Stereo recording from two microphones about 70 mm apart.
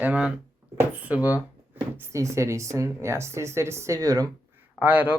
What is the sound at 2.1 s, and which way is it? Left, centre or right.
Speech, right.